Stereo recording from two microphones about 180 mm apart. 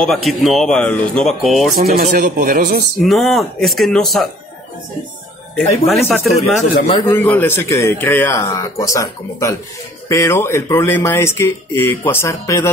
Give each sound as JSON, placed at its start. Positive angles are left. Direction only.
{"t": 0.0, "sound": "speech", "side_deg": 0}
{"t": 1.8, "sound": "speech", "side_deg": -55}
{"t": 3.0, "sound": "speech", "side_deg": 0}
{"t": 5.9, "sound": "speech", "side_deg": 0}
{"t": 7.1, "sound": "speech", "side_deg": 10}